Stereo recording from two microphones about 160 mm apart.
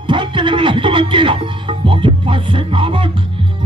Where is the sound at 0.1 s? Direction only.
30° right (ahead or behind).